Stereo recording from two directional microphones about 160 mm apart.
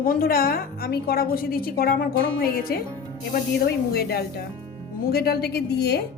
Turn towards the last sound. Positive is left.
turn(degrees=90)